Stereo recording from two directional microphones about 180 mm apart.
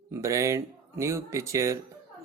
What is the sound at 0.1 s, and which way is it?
Speech, 15° right (ahead or behind).